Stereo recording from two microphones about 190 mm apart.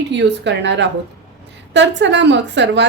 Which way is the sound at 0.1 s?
65° right (ahead or behind).